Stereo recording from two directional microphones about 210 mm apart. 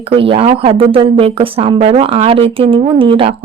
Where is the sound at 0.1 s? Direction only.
25° right (ahead or behind).